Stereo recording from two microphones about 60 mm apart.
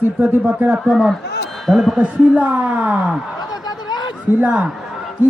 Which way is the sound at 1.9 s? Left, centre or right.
Right.